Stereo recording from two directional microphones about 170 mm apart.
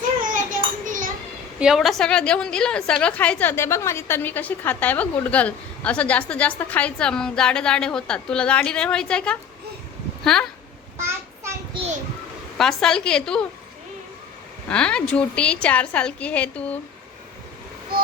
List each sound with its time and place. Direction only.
0.9 s children playing: 50° right (ahead or behind)
1.5 s a woman's voice: 5° right (ahead or behind)
10.9 s child singing: 15° right (ahead or behind)
11.7 s a sound: 35° right (ahead or behind)
12.5 s a woman's voice: 5° left (ahead or behind)
14.7 s a woman's voice: 5° left (ahead or behind)